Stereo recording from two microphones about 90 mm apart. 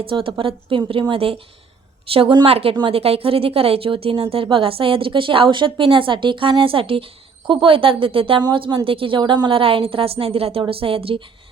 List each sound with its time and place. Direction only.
0.0 s a woman's voice: 80° right
8.4 s a woman's voice: 65° right (ahead or behind); by 11.2 s 90° right